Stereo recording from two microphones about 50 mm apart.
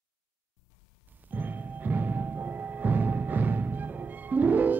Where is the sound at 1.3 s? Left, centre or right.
Right.